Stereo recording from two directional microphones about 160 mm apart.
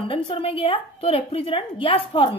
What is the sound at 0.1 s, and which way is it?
A woman's voice, 35° left (ahead or behind).